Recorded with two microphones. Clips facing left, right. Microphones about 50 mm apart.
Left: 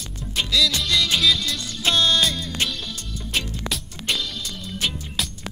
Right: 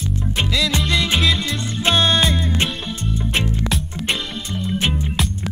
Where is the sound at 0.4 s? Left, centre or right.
Right.